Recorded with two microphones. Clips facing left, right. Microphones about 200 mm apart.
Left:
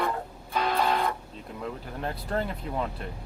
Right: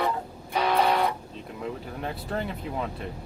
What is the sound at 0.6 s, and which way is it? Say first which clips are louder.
Music: right 3 dB; 65° right (ahead or behind).